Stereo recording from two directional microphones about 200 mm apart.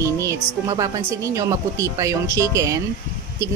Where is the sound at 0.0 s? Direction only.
15° right (ahead or behind).